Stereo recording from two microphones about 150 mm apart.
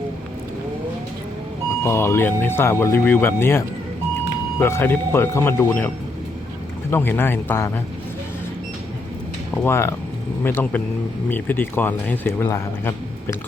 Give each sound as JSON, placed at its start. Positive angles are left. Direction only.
{"t": 1.8, "sound": "speech", "side_deg": 15}
{"t": 4.6, "sound": "speech", "side_deg": 15}
{"t": 6.9, "sound": "speech", "side_deg": 15}
{"t": 9.6, "sound": "speech", "side_deg": 15}